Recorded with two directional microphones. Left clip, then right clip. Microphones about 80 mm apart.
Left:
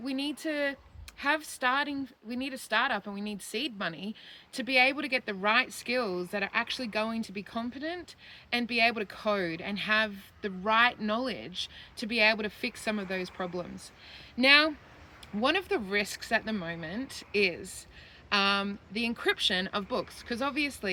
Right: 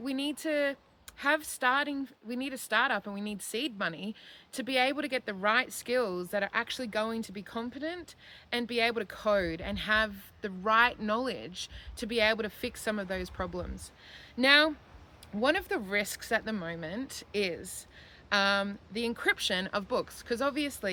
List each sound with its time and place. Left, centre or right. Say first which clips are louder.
0.0 s a woman's voice: even; right